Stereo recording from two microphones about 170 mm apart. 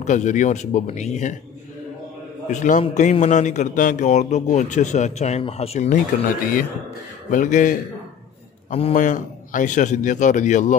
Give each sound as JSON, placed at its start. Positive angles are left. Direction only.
{"t": 0.0, "sound": "a man's voice", "side_deg": 45}
{"t": 2.4, "sound": "a man's voice", "side_deg": 45}
{"t": 7.2, "sound": "a man's voice", "side_deg": 50}
{"t": 8.7, "sound": "a man's voice", "side_deg": 40}